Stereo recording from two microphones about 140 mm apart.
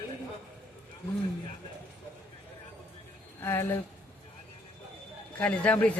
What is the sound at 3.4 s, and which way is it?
Speech, 20° left (ahead or behind).